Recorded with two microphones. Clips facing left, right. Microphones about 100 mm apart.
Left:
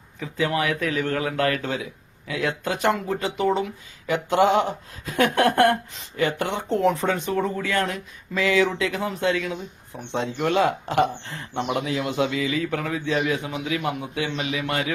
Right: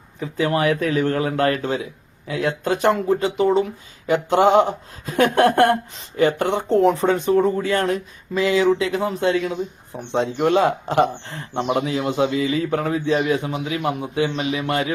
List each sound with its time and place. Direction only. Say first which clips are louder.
0.2 s speech: right 4 dB; 40° right (ahead or behind)